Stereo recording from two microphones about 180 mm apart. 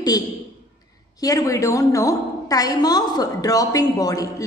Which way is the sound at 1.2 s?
20° left (ahead or behind).